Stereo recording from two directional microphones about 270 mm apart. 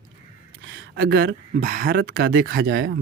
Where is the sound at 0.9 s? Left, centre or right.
Right.